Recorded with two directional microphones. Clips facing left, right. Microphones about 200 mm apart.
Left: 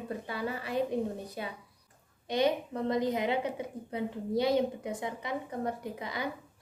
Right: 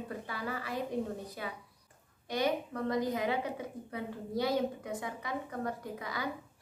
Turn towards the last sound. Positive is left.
turn(degrees=20)  # may be behind; listen again after turning